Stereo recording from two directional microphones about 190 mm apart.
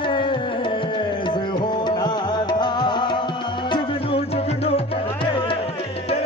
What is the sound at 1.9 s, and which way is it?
Music, 25° left (ahead or behind).